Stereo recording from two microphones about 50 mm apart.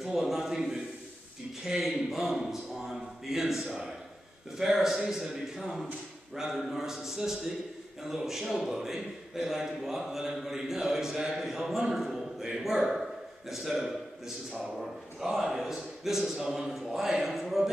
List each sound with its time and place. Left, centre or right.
0.0 s a sound: centre
4.6 s a man's voice: centre
15.2 s a man's voice: centre